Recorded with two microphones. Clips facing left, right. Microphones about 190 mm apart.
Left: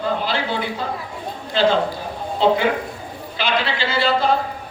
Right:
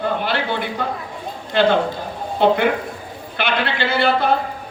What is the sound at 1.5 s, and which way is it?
A man's voice, 60° right (ahead or behind).